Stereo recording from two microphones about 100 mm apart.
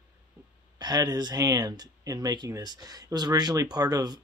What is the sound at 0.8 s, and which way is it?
Speech, 40° right (ahead or behind).